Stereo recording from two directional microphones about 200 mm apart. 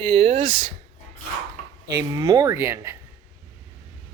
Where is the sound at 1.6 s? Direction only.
35° left (ahead or behind).